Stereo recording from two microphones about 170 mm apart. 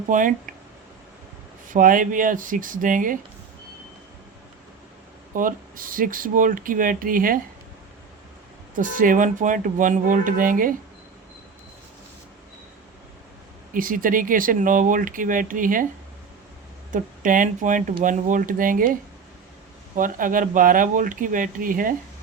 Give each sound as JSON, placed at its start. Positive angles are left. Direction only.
{"t": 0.1, "sound": "speech", "side_deg": -50}
{"t": 1.7, "sound": "speech", "side_deg": -50}
{"t": 5.3, "sound": "speech", "side_deg": -50}
{"t": 8.7, "sound": "speech", "side_deg": -50}
{"t": 13.7, "sound": "speech", "side_deg": -55}
{"t": 16.9, "sound": "speech", "side_deg": -50}
{"t": 20.0, "sound": "speech", "side_deg": -55}